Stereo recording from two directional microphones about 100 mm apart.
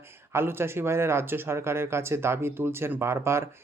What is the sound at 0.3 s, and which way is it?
Speech, 25° right (ahead or behind).